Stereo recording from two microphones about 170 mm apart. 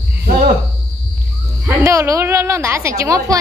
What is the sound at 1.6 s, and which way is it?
A woman's voice, 15° right (ahead or behind).